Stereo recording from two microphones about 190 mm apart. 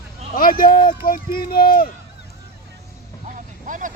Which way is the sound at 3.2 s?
40° right (ahead or behind).